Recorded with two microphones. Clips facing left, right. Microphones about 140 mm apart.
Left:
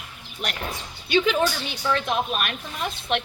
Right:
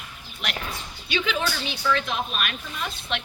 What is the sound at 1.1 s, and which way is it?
A woman's voice, 50° left (ahead or behind).